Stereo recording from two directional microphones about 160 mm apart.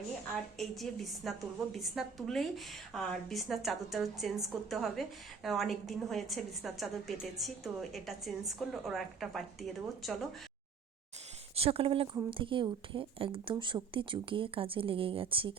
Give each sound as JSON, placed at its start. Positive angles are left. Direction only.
{"t": 0.6, "sound": "a woman's voice", "side_deg": 0}
{"t": 11.5, "sound": "speech", "side_deg": -35}